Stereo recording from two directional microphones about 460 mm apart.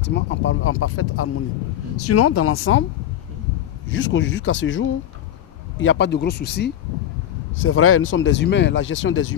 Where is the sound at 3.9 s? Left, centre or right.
Left.